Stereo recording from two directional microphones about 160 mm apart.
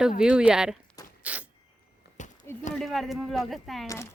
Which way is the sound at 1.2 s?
10° right (ahead or behind).